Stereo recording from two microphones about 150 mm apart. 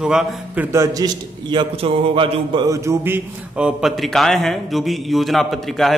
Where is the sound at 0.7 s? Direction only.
20° right (ahead or behind).